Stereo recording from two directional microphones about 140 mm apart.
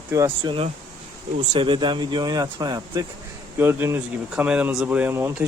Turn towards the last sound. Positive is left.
turn(degrees=-15)  # may be behind; listen again after turning